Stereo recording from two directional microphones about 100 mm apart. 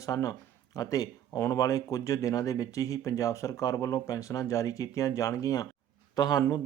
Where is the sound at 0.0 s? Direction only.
35° left (ahead or behind).